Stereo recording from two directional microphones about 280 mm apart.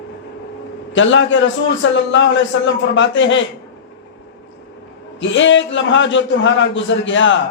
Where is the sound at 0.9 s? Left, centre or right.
Left.